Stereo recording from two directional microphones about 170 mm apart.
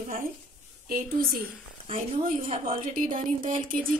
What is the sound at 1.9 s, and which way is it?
Speech, 30° right (ahead or behind).